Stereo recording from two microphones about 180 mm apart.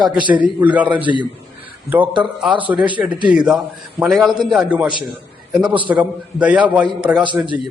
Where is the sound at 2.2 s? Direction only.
10° right (ahead or behind).